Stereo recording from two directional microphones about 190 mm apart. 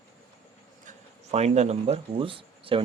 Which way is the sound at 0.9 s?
35° right (ahead or behind).